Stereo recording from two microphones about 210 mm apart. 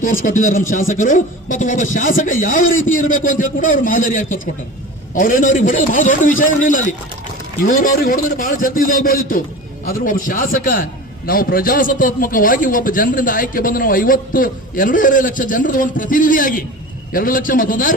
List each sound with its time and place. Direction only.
0.0 s a man's voice: 40° left (ahead or behind)